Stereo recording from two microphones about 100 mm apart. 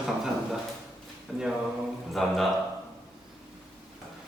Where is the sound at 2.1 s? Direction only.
Centre (ahead or behind).